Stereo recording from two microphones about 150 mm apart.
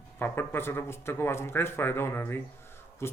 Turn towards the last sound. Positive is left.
turn(degrees=15)  # may be behind; listen again after turning